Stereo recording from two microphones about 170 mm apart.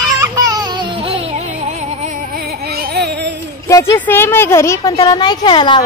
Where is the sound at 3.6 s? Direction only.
15° left (ahead or behind).